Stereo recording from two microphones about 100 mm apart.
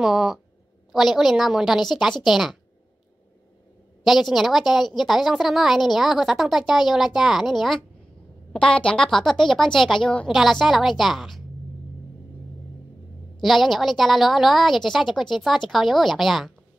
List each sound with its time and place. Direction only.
0.0 s a woman's voice: centre (ahead or behind)
4.0 s a woman's voice: centre (ahead or behind)
13.4 s a woman's voice: centre (ahead or behind)